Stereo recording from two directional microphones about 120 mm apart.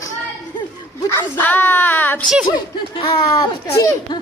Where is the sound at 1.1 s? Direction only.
15° left (ahead or behind).